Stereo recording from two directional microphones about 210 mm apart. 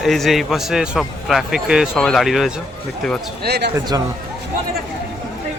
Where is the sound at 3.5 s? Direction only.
50° right (ahead or behind).